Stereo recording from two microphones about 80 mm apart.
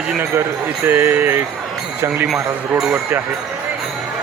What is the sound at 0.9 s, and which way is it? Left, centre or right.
Speech, right.